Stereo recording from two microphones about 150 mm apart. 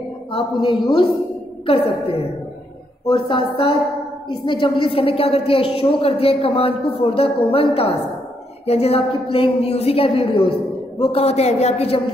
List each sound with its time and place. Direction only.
0.3 s a woman's voice: 35° left (ahead or behind)